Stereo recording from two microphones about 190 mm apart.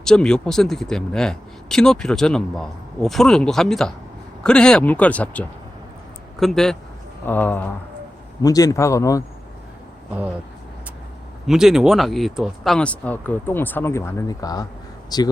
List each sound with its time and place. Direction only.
0.0 s speech: 5° left (ahead or behind)
11.4 s speech: centre (ahead or behind); by 15.3 s 20° left (ahead or behind)